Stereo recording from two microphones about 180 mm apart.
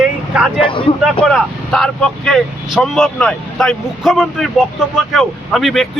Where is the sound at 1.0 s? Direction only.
Centre (ahead or behind).